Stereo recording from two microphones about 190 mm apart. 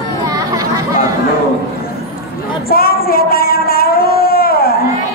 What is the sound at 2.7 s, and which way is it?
Child singing, 50° left (ahead or behind).